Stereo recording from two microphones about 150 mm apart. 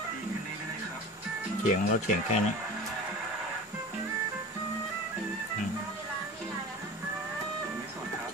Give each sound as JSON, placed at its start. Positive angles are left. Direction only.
{"t": 1.6, "sound": "speech", "side_deg": 50}